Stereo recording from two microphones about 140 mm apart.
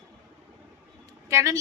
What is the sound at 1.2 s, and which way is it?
Speech, 20° right (ahead or behind).